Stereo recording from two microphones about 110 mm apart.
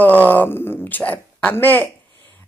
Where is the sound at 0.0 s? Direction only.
15° left (ahead or behind).